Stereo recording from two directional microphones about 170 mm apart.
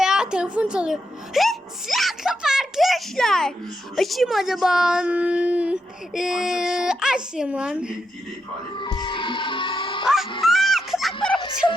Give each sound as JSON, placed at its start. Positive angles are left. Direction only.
{"t": 0.0, "sound": "a child's voice", "side_deg": -5}
{"t": 8.7, "sound": "music", "side_deg": 25}
{"t": 10.4, "sound": "music", "side_deg": 0}